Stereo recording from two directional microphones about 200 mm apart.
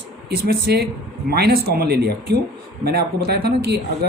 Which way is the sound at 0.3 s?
50° right (ahead or behind).